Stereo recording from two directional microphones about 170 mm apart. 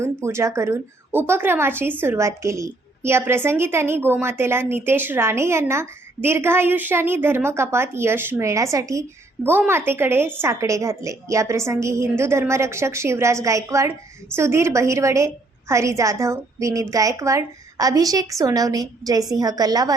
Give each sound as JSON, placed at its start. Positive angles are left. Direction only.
{"t": 0.0, "sound": "a woman's voice", "side_deg": -15}